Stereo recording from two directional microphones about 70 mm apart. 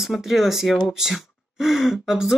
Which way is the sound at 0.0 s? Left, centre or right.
Centre.